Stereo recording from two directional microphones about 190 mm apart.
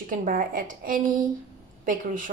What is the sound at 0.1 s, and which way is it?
A woman's voice, 45° right (ahead or behind).